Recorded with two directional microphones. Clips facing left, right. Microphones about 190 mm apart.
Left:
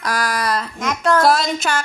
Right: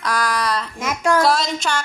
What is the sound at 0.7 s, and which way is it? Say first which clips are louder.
Speech: even; 10° right (ahead or behind).